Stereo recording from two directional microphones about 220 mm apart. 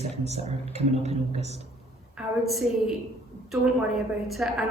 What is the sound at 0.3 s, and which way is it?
Speech, 30° right (ahead or behind).